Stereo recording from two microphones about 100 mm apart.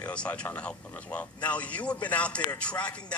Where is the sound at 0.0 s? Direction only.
10° left (ahead or behind).